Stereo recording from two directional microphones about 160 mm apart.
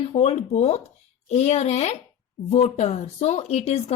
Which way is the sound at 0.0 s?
40° left (ahead or behind).